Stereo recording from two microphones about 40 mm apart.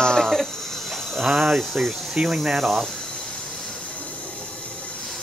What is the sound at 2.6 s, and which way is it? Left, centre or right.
Speech, centre.